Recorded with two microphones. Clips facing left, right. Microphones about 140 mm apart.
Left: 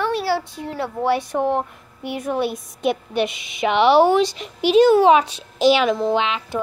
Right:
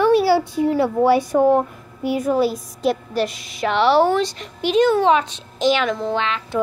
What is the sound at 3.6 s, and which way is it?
A woman's voice, 20° left (ahead or behind).